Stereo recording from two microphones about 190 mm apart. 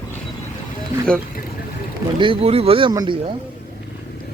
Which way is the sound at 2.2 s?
30° right (ahead or behind).